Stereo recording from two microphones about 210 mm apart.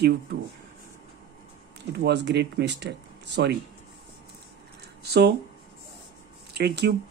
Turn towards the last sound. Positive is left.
turn(degrees=-50)  # may be behind; listen again after turning